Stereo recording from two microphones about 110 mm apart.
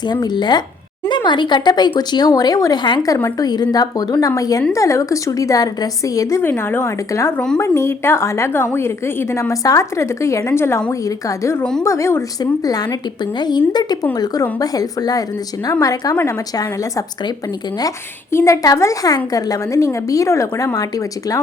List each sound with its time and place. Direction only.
0.1 s a woman's voice: 40° left (ahead or behind)
6.4 s a woman's voice: 20° left (ahead or behind)
13.4 s a woman's voice: 40° left (ahead or behind)
17.7 s a woman's voice: 30° left (ahead or behind)